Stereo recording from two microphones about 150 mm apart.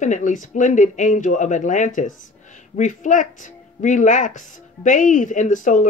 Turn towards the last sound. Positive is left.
turn(degrees=60)  # may be behind; listen again after turning